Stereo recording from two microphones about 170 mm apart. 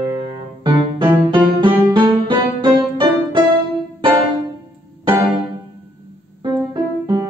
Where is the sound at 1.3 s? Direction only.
30° right (ahead or behind).